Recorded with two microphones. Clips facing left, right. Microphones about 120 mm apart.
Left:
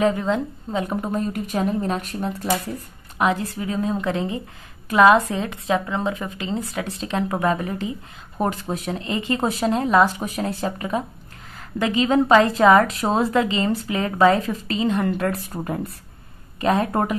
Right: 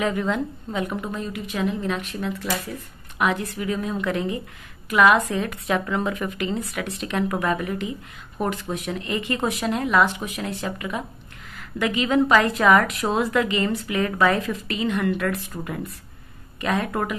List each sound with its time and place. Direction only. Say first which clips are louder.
0.0 s speech: left 3 dB; 30° left (ahead or behind)
3.2 s a woman's voice: left 2 dB; 30° left (ahead or behind)